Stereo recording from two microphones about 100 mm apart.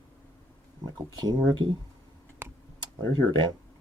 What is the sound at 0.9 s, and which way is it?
Speech, 45° right (ahead or behind).